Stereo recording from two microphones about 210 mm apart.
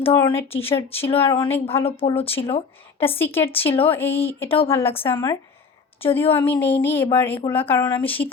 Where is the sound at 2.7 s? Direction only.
10° left (ahead or behind).